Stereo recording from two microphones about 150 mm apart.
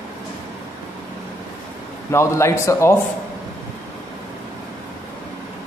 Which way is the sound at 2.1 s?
20° left (ahead or behind).